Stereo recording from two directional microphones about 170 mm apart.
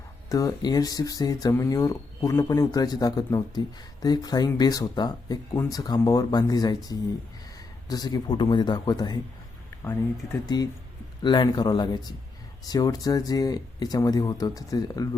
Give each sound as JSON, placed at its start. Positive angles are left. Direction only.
{"t": 0.3, "sound": "speech", "side_deg": 20}
{"t": 10.5, "sound": "speech", "side_deg": 25}